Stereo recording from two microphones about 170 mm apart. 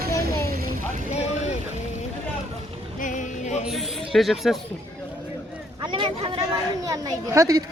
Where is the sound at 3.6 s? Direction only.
Centre (ahead or behind).